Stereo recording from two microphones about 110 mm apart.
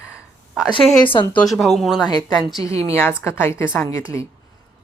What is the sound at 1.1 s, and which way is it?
Speech, 50° left (ahead or behind).